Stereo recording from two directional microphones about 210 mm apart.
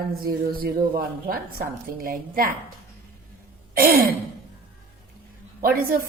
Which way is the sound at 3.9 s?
45° right (ahead or behind).